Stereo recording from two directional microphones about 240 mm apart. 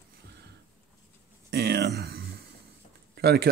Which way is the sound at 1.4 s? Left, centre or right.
Right.